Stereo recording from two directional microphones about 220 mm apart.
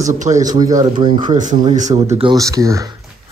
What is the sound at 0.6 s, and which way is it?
Speech, 15° right (ahead or behind).